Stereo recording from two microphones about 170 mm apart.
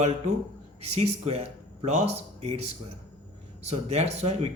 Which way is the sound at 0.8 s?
40° right (ahead or behind).